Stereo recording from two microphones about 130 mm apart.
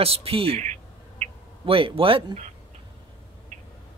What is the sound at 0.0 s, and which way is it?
Speech, 50° right (ahead or behind).